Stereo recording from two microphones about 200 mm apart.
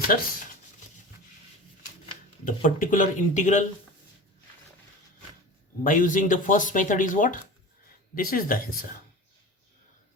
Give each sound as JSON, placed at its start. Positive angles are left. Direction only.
{"t": 0.1, "sound": "speech", "side_deg": 45}
{"t": 2.4, "sound": "speech", "side_deg": 45}
{"t": 5.8, "sound": "speech", "side_deg": 40}